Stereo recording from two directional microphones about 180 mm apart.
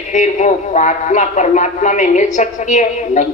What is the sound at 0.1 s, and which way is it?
A man's voice, 45° left (ahead or behind).